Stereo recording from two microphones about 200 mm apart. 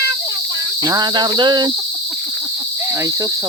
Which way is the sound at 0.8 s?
20° right (ahead or behind).